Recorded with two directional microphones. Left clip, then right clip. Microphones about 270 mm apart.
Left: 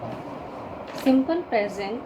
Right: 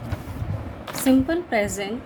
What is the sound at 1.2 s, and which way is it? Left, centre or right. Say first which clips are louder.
Speech: right 1 dB; right.